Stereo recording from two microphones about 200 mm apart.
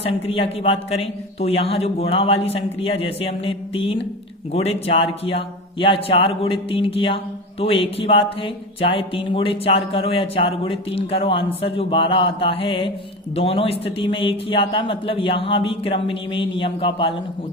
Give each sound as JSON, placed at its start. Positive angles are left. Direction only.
{"t": 0.0, "sound": "speech", "side_deg": 30}